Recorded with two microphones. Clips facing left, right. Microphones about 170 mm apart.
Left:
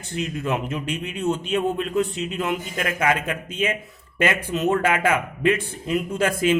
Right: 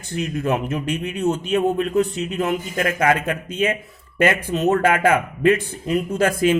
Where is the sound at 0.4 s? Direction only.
45° right (ahead or behind).